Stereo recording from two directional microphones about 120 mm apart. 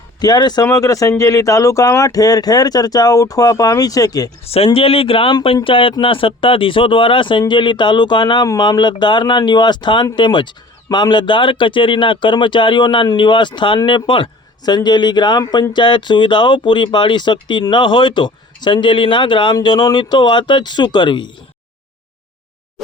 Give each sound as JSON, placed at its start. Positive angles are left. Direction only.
{"t": 0.2, "sound": "speech", "side_deg": 35}
{"t": 4.4, "sound": "speech", "side_deg": 55}